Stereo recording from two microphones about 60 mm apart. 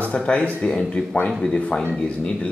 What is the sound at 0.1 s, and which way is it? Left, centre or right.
Speech, centre.